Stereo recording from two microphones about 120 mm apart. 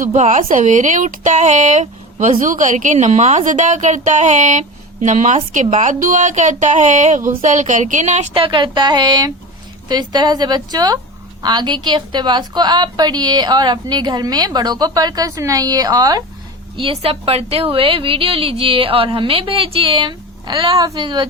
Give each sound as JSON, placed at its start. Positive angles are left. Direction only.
{"t": 0.1, "sound": "speech", "side_deg": -85}
{"t": 8.3, "sound": "a woman's voice", "side_deg": -45}
{"t": 16.7, "sound": "a woman's voice", "side_deg": -50}
{"t": 20.7, "sound": "a woman's voice", "side_deg": -35}